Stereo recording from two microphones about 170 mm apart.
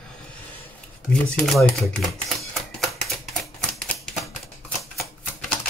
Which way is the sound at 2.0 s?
Centre (ahead or behind).